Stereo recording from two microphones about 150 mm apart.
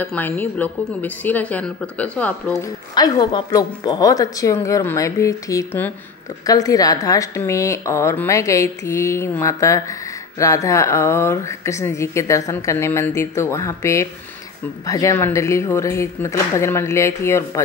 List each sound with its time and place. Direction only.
0.0 s a woman's voice: 10° left (ahead or behind)
2.9 s speech: 25° left (ahead or behind)
6.4 s speech: 25° left (ahead or behind)